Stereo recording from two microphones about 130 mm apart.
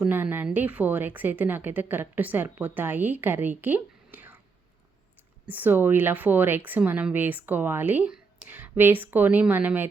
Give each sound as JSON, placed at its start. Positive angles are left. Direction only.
{"t": 0.0, "sound": "a woman's voice", "side_deg": -15}
{"t": 5.5, "sound": "a woman's voice", "side_deg": -15}